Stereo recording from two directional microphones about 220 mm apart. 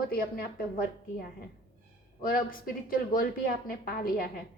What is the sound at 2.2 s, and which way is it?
A woman's voice, 40° left (ahead or behind).